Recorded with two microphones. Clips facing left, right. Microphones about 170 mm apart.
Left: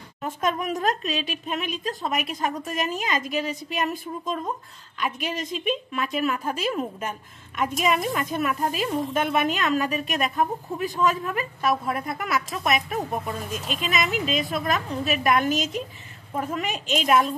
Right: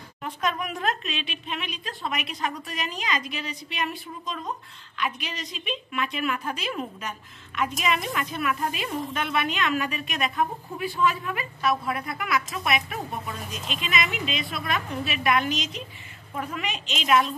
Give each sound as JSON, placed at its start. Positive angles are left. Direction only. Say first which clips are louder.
{"t": 0.2, "sound": "a woman's voice", "louder": "left 3 dB", "side_deg": 45}